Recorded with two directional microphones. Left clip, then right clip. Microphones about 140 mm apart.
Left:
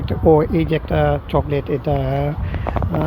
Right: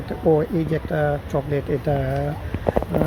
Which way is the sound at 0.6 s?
20° left (ahead or behind).